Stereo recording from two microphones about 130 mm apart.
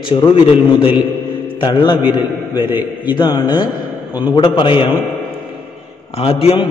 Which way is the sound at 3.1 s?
30° left (ahead or behind).